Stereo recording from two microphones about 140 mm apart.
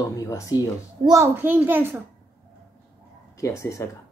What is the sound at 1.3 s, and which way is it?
Speech, 15° right (ahead or behind).